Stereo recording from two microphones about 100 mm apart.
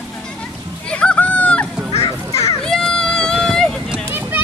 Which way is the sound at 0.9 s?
10° left (ahead or behind).